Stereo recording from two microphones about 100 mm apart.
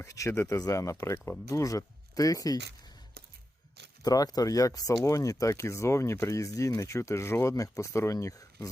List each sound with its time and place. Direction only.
0.0 s speech: 30° left (ahead or behind)
4.0 s speech: 35° left (ahead or behind)